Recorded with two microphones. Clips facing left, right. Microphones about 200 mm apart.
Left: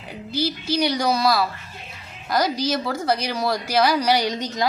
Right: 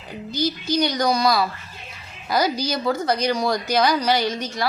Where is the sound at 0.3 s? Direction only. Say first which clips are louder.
Right 1 dB; 5° left (ahead or behind).